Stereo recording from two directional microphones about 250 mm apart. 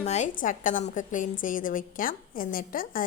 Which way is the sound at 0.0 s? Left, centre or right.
Left.